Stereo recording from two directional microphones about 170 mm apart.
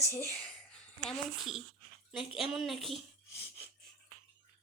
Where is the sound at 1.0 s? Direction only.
Centre (ahead or behind).